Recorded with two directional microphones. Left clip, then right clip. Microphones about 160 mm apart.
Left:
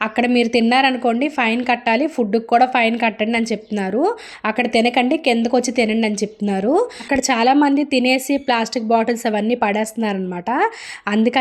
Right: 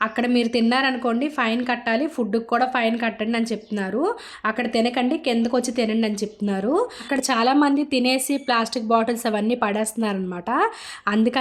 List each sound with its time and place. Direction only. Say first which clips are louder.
0.0 s a woman's voice: left 4 dB; 20° left (ahead or behind)